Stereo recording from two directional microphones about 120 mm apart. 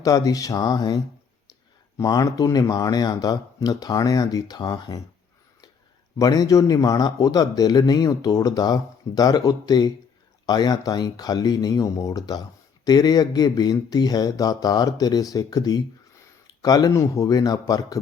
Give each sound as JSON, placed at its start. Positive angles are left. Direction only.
{"t": 0.0, "sound": "speech", "side_deg": 30}
{"t": 6.1, "sound": "speech", "side_deg": 30}